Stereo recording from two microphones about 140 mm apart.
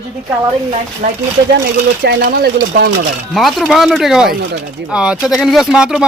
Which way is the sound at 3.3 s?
Centre (ahead or behind).